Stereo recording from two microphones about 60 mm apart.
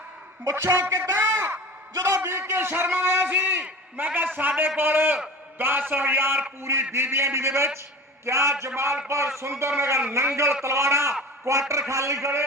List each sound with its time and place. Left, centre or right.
0.4 s a man's voice: right
1.1 s a sound: right
2.0 s a man's voice: right
6.6 s a man's voice: right